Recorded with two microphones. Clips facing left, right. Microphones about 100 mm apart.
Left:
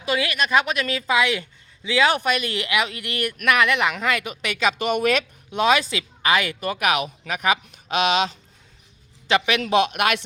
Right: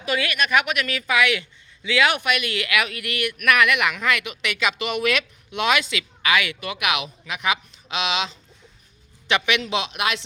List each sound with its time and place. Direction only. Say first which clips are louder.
0.0 s speech: left 1 dB; 30° left (ahead or behind); by 10.2 s 55° left (ahead or behind)